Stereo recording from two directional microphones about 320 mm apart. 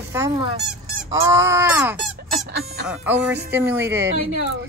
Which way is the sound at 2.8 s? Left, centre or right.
Centre.